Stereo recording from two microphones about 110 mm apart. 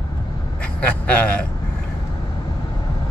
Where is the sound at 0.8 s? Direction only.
10° left (ahead or behind).